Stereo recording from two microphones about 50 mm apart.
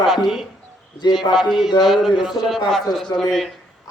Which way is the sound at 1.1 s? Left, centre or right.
Centre.